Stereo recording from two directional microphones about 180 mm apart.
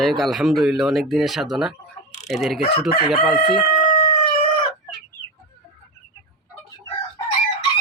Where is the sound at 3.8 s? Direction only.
40° left (ahead or behind).